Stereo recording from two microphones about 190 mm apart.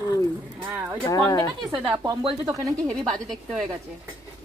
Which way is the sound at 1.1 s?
20° left (ahead or behind).